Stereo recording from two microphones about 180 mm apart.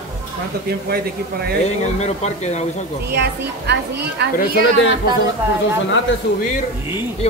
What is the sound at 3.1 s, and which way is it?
Speech, 65° right (ahead or behind).